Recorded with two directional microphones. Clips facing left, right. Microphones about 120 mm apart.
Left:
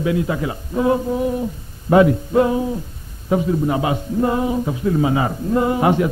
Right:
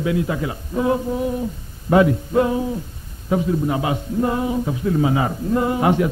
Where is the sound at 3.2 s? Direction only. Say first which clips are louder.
Left 2 dB; 20° left (ahead or behind).